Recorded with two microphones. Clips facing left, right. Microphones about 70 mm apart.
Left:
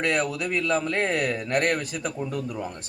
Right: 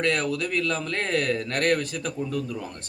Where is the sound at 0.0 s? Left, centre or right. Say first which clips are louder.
Even; centre.